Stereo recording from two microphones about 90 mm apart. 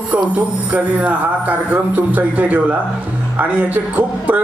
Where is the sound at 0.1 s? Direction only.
15° right (ahead or behind).